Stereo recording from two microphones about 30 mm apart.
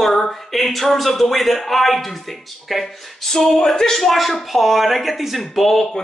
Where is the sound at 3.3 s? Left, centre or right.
Centre.